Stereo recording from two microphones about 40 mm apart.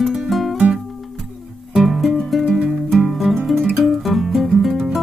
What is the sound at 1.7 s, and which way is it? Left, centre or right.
Music, centre.